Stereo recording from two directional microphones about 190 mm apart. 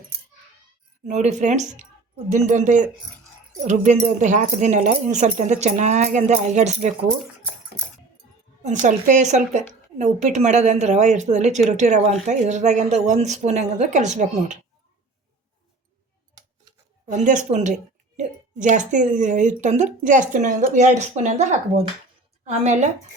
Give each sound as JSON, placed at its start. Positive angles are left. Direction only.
{"t": 1.0, "sound": "speech", "side_deg": -35}
{"t": 8.6, "sound": "speech", "side_deg": -40}
{"t": 17.1, "sound": "speech", "side_deg": -40}
{"t": 22.4, "sound": "speech", "side_deg": -40}